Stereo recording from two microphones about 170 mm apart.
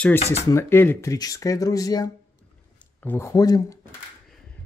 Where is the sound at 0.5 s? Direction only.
15° left (ahead or behind).